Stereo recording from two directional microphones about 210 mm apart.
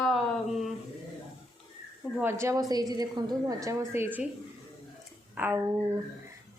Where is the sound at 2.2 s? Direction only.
15° right (ahead or behind).